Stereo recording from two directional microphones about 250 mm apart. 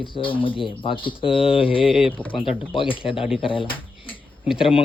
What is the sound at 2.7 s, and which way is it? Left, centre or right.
Speech, left.